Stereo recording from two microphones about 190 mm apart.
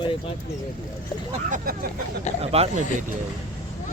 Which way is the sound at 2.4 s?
30° right (ahead or behind).